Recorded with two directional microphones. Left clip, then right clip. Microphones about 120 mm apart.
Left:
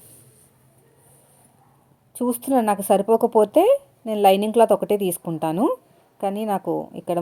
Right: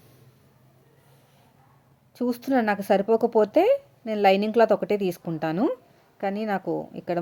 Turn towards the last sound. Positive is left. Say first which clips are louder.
# left 4 dB
turn(degrees=30)  # may be behind; listen again after turning